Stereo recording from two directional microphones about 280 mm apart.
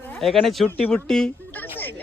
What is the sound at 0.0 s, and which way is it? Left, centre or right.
Speech, centre.